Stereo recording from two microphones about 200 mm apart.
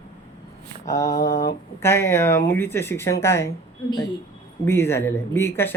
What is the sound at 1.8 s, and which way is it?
Speech, 10° left (ahead or behind).